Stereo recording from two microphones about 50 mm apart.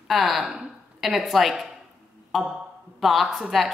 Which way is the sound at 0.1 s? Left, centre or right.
Centre.